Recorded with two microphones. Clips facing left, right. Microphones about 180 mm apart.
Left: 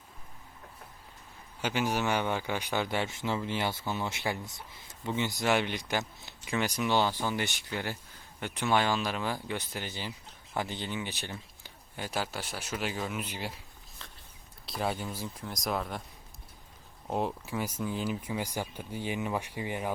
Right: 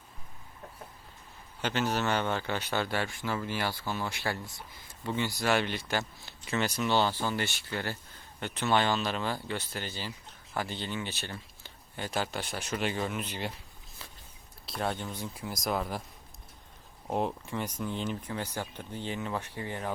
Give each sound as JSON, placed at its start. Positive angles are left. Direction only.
{"t": 1.6, "sound": "speech", "side_deg": 10}
{"t": 14.0, "sound": "a sound", "side_deg": -10}
{"t": 14.7, "sound": "speech", "side_deg": 5}
{"t": 17.1, "sound": "speech", "side_deg": 0}